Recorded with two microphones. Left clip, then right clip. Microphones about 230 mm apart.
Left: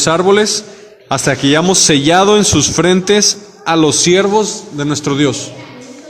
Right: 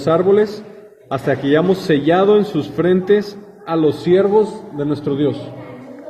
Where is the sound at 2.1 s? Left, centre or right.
Left.